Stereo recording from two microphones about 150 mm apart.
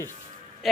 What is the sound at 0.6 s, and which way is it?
Music, centre (ahead or behind).